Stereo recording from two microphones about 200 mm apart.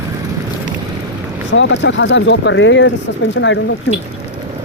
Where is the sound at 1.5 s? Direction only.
65° left (ahead or behind).